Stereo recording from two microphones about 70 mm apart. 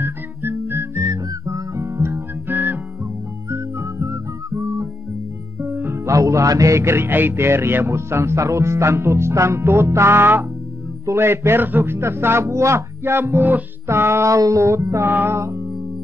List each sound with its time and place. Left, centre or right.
0.0 s music: right
1.0 s music: right
3.4 s music: right
5.6 s music: right
6.0 s music: right
15.0 s music: right